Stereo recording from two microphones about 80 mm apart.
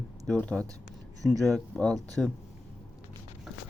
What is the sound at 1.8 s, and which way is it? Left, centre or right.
Speech, centre.